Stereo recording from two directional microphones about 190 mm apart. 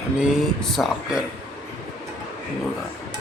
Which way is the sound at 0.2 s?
Centre (ahead or behind).